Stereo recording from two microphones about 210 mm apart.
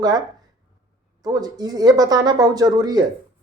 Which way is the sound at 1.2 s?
20° right (ahead or behind).